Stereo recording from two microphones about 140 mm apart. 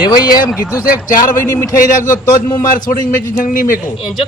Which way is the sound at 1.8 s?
70° left (ahead or behind).